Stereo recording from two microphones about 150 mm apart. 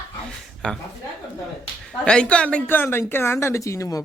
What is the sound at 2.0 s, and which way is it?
Speech, 5° left (ahead or behind).